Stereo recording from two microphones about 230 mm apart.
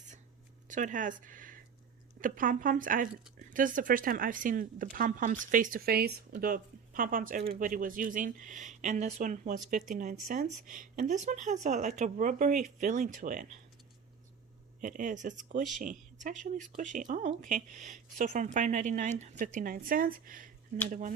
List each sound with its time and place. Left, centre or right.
0.7 s speech: right
14.8 s speech: right